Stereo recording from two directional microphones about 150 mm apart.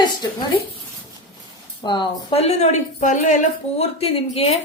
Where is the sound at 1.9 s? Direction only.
35° left (ahead or behind).